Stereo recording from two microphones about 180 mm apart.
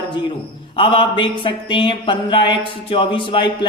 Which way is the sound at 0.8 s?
30° left (ahead or behind).